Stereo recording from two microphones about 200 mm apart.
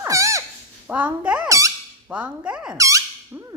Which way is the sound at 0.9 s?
5° right (ahead or behind).